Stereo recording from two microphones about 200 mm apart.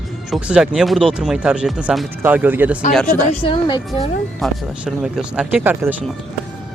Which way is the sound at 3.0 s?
30° left (ahead or behind).